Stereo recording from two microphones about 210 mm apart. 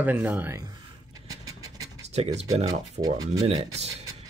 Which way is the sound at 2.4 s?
15° right (ahead or behind).